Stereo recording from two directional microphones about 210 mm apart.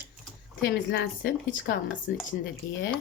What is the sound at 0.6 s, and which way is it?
Speech, 55° left (ahead or behind).